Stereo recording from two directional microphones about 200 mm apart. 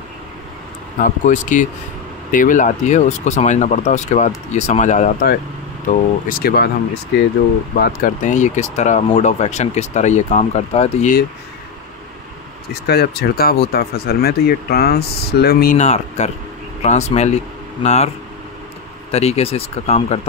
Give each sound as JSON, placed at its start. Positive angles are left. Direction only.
{"t": 0.9, "sound": "speech", "side_deg": 40}
{"t": 7.8, "sound": "speech", "side_deg": 40}
{"t": 12.8, "sound": "speech", "side_deg": 55}
{"t": 19.1, "sound": "speech", "side_deg": 30}